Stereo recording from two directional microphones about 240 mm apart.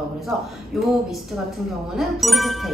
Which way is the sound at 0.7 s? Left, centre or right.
Centre.